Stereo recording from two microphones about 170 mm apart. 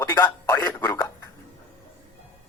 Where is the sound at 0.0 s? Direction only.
15° left (ahead or behind).